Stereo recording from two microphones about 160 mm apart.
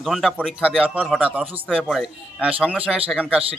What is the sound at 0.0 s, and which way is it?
A man's voice, centre (ahead or behind).